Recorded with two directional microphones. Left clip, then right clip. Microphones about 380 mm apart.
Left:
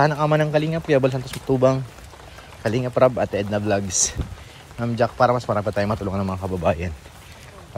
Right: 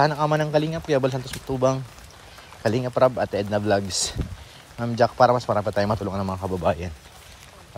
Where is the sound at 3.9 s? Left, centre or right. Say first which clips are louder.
Left 4 dB; right.